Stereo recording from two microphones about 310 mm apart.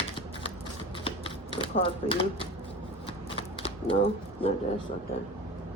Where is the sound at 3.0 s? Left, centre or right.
Centre.